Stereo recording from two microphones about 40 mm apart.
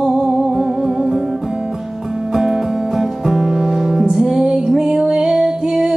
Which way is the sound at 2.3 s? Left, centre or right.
Centre.